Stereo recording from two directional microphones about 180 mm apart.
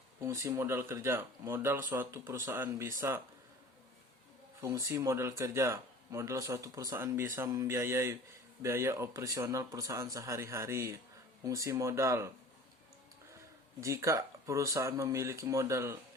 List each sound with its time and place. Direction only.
0.3 s speech: 15° right (ahead or behind)
4.6 s speech: 20° right (ahead or behind)
13.8 s speech: 15° right (ahead or behind)